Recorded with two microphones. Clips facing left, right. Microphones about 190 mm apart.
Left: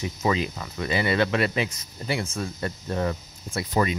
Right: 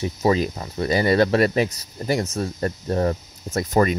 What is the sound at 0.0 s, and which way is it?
Speech, 35° right (ahead or behind).